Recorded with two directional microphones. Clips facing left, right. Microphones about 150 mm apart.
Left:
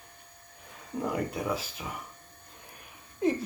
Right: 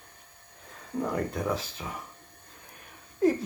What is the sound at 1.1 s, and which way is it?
Speech, 10° left (ahead or behind).